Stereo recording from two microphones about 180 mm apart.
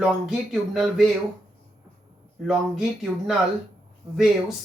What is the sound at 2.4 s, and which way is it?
Speech, 5° right (ahead or behind).